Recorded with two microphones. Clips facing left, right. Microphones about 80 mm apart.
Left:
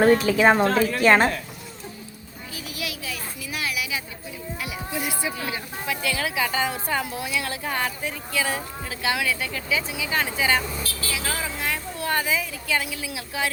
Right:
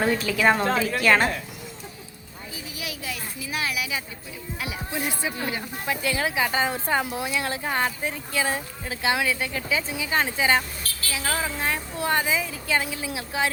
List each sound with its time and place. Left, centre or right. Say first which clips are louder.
0.3 s speech: left 3 dB; left
3.5 s a sound: right 1 dB; right
4.6 s a woman's voice: right 1 dB; right